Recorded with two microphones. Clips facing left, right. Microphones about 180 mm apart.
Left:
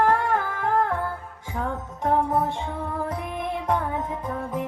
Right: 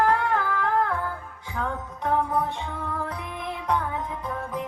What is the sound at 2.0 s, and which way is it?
Music, 45° left (ahead or behind).